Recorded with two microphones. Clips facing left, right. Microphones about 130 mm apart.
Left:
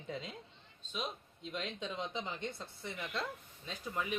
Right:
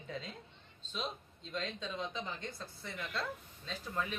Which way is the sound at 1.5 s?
15° left (ahead or behind).